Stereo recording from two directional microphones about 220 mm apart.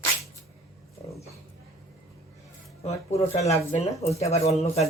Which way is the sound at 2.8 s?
30° left (ahead or behind).